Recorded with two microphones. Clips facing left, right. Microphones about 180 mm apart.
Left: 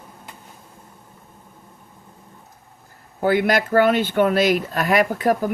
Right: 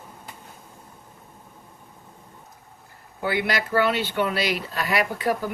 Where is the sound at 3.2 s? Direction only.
45° left (ahead or behind).